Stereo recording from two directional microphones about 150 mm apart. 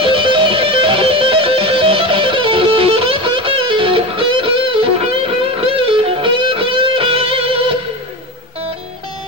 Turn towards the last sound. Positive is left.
turn(degrees=-40)  # may be behind; listen again after turning